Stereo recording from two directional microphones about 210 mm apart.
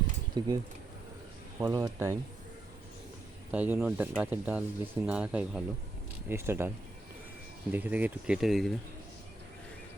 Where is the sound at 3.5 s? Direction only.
5° right (ahead or behind).